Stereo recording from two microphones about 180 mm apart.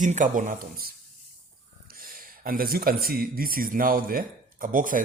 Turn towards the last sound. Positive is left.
turn(degrees=-50)  # may be behind; listen again after turning